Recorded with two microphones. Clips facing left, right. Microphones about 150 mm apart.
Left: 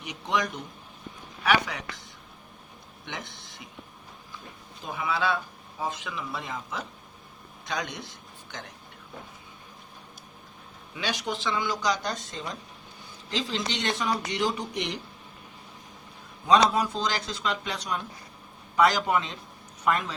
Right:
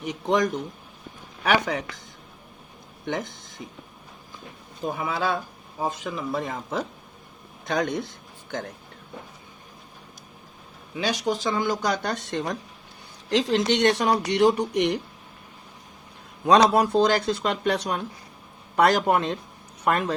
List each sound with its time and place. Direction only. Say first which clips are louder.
0.0 s speech: right 6 dB; 45° right (ahead or behind)
3.1 s speech: right 10 dB; 45° right (ahead or behind)
4.9 s a man's voice: right 2 dB; 45° right (ahead or behind)
10.9 s speech: right 6 dB; 40° right (ahead or behind); by 15.0 s 60° right (ahead or behind)
16.5 s speech: right 4 dB; 80° right; by 20.1 s 60° right (ahead or behind)